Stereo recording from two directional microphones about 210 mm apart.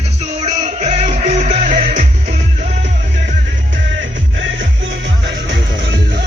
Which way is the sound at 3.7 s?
60° right (ahead or behind).